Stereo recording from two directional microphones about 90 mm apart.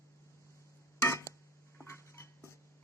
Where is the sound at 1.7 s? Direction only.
30° left (ahead or behind).